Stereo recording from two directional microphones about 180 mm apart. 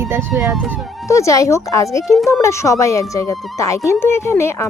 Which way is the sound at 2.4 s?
15° left (ahead or behind).